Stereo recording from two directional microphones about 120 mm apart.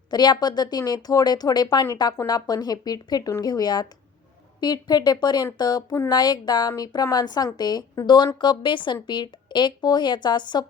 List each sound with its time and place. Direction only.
0.1 s a woman's voice: 35° left (ahead or behind)